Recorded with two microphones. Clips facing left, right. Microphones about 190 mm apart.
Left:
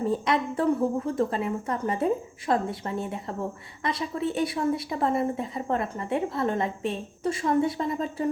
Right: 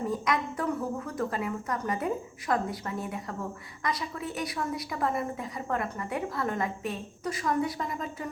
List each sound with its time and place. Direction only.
0.0 s a woman's voice: 30° left (ahead or behind)